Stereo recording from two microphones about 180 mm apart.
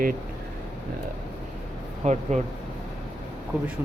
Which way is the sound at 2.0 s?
40° right (ahead or behind).